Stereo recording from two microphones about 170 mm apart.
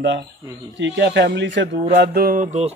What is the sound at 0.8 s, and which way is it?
Speech, 85° right.